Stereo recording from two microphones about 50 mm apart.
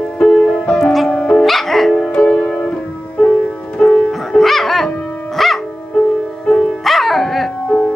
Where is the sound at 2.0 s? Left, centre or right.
Centre.